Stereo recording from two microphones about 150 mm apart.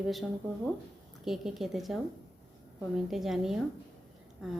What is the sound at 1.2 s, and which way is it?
A woman's voice, centre (ahead or behind).